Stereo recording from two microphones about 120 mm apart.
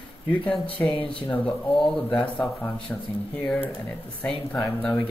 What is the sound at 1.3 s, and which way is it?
A man's voice, 10° left (ahead or behind).